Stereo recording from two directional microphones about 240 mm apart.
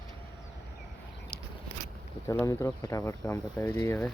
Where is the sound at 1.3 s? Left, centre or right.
Left.